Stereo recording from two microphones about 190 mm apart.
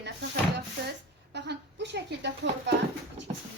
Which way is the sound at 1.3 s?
65° right (ahead or behind).